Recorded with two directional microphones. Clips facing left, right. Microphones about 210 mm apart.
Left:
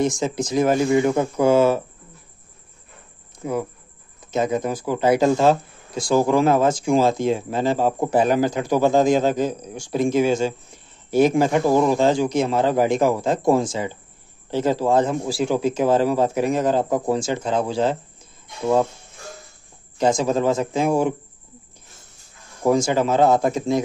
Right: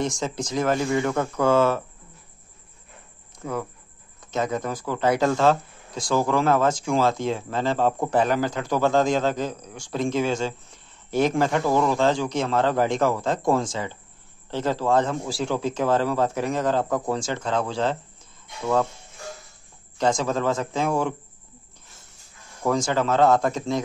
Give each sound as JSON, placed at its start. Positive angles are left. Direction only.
{"t": 0.0, "sound": "speech", "side_deg": 5}
{"t": 3.4, "sound": "speech", "side_deg": 15}
{"t": 20.0, "sound": "speech", "side_deg": 10}
{"t": 22.6, "sound": "speech", "side_deg": 10}